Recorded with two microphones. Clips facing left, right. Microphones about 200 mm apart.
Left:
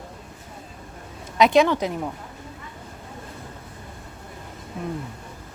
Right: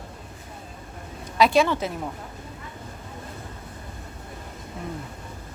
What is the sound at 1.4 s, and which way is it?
Speech, 20° left (ahead or behind).